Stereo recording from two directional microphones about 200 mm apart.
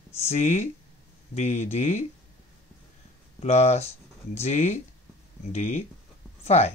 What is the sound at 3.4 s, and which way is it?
Speech, 35° left (ahead or behind).